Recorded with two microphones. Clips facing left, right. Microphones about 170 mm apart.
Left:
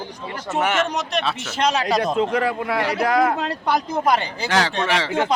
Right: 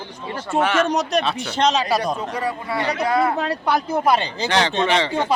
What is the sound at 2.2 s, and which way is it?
Speech, 90° left.